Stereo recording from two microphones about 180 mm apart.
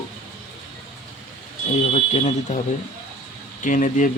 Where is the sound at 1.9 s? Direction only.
40° left (ahead or behind).